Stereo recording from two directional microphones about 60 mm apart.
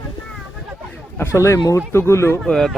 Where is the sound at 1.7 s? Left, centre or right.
Left.